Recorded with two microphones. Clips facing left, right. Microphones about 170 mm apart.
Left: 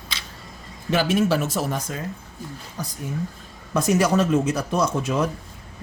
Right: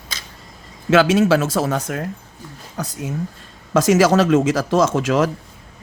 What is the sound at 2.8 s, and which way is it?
Speech, 80° right.